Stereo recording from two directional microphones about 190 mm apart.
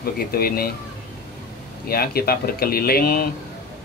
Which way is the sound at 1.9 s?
55° left (ahead or behind).